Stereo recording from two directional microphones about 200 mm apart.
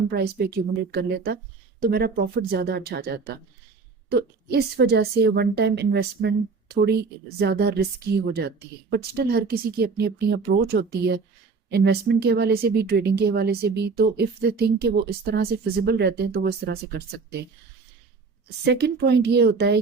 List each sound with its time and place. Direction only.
0.1 s a woman's voice: 50° right (ahead or behind)
18.4 s a woman's voice: 55° right (ahead or behind)